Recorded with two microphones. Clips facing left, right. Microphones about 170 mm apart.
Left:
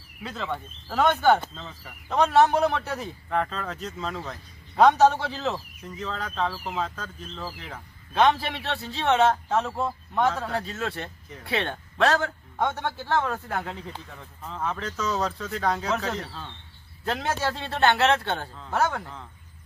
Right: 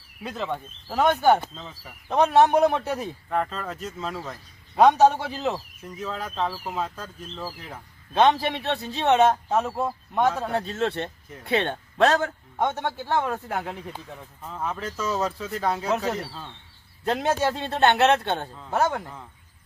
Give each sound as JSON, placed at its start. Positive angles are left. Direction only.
{"t": 0.2, "sound": "a man's voice", "side_deg": -15}
{"t": 2.0, "sound": "a man's voice", "side_deg": -15}
{"t": 3.2, "sound": "a man's voice", "side_deg": -5}
{"t": 8.1, "sound": "a man's voice", "side_deg": -20}
{"t": 10.5, "sound": "a man's voice", "side_deg": -25}
{"t": 17.0, "sound": "a man's voice", "side_deg": -20}